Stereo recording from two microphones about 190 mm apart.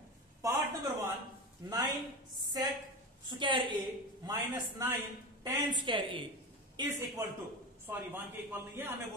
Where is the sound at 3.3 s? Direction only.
25° right (ahead or behind).